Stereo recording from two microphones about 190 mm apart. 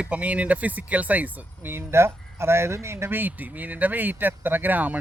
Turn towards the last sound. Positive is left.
turn(degrees=-10)  # may be behind; listen again after turning